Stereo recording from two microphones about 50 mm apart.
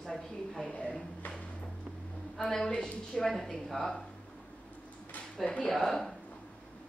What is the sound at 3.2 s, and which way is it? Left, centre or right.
Speech, centre.